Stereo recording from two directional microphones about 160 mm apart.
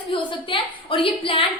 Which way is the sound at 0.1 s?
30° left (ahead or behind).